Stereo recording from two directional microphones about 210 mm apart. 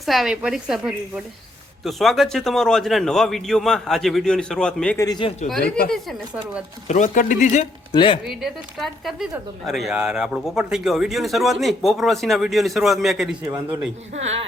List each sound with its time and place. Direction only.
0.0 s speech: centre (ahead or behind)
4.9 s speech: 20° left (ahead or behind)
5.6 s speech: 45° left (ahead or behind)
5.9 s speech: centre (ahead or behind)
6.8 s a man's voice: 35° left (ahead or behind)
7.9 s speech: 25° left (ahead or behind)
8.2 s speech: centre (ahead or behind)
14.1 s speech: 30° right (ahead or behind)